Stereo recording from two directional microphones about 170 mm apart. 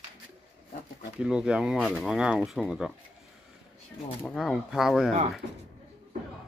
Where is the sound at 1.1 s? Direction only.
5° right (ahead or behind).